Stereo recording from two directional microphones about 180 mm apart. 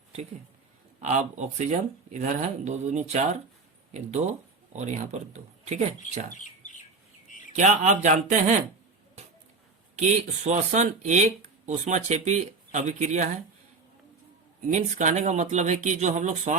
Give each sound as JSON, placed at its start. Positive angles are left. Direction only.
{"t": 1.0, "sound": "speech", "side_deg": -40}
{"t": 4.7, "sound": "speech", "side_deg": -40}
{"t": 6.3, "sound": "bird", "side_deg": 45}
{"t": 7.3, "sound": "a sound", "side_deg": 45}
{"t": 7.5, "sound": "speech", "side_deg": -40}
{"t": 10.0, "sound": "speech", "side_deg": -40}
{"t": 14.7, "sound": "speech", "side_deg": -45}